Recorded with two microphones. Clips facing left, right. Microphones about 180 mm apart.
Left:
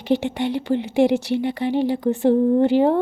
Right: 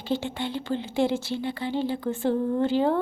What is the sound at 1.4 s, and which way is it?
Speech, 20° left (ahead or behind).